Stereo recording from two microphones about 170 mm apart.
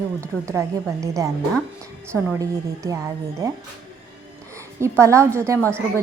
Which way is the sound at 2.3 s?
20° right (ahead or behind).